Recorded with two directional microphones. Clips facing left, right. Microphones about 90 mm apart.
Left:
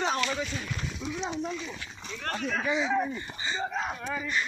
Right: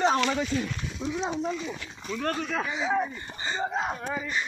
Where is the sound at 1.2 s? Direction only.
10° right (ahead or behind).